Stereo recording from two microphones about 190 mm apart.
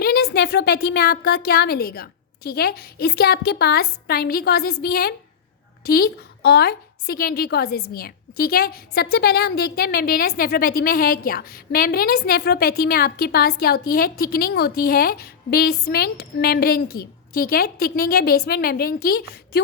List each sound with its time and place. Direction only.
0.0 s a woman's voice: 55° left (ahead or behind)